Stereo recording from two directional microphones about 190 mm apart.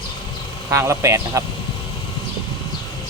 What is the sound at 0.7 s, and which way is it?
Speech, 15° right (ahead or behind).